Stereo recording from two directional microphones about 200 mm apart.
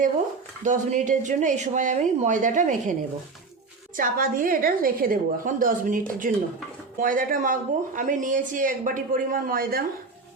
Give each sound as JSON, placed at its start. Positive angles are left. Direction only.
{"t": 0.6, "sound": "a woman's voice", "side_deg": -40}
{"t": 3.9, "sound": "speech", "side_deg": -45}